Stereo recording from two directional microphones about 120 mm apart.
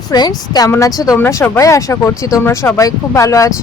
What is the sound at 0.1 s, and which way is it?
Speech, 35° left (ahead or behind).